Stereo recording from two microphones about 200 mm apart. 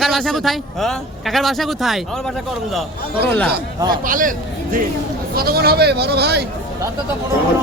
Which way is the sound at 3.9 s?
40° right (ahead or behind).